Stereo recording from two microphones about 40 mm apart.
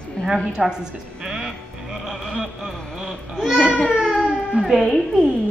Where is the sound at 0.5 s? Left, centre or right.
Centre.